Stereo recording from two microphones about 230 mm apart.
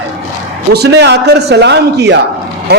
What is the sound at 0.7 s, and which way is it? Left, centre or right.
A man's voice, right.